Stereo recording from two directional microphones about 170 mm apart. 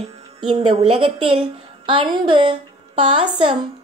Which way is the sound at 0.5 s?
35° right (ahead or behind).